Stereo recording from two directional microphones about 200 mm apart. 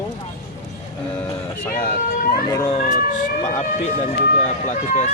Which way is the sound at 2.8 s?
40° left (ahead or behind).